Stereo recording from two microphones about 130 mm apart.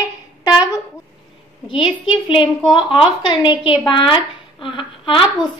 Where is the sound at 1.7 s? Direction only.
40° left (ahead or behind).